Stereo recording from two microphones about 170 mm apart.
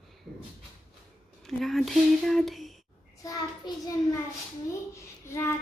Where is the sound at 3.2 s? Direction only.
20° left (ahead or behind).